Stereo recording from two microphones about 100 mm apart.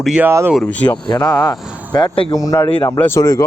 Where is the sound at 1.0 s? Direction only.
45° left (ahead or behind).